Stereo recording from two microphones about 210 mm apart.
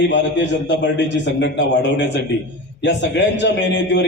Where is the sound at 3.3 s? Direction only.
55° left (ahead or behind).